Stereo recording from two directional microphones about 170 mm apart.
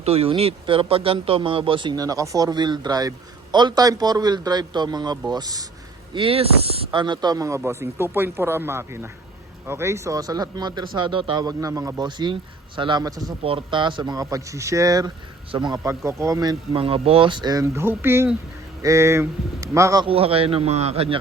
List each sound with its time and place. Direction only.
0.0 s speech: 35° right (ahead or behind)
6.1 s speech: 35° right (ahead or behind)
13.4 s speech: 30° right (ahead or behind)
20.1 s a man's voice: 35° right (ahead or behind)